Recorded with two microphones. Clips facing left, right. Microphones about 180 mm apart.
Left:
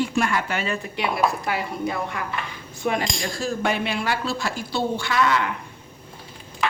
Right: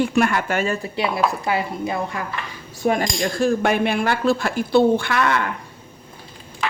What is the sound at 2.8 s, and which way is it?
Speech, 45° right (ahead or behind).